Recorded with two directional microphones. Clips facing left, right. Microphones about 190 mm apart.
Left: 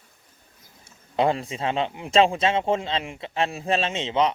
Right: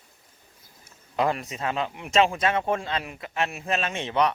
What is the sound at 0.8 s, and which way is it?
Speech, 30° left (ahead or behind).